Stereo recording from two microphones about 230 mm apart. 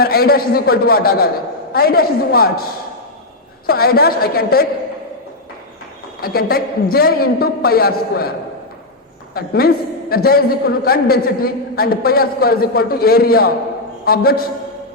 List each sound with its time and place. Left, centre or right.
0.0 s a man's voice: left
3.7 s a man's voice: left
6.1 s a man's voice: left
9.3 s a man's voice: left